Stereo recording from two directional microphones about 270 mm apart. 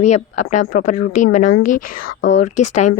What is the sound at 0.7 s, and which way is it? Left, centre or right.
Speech, left.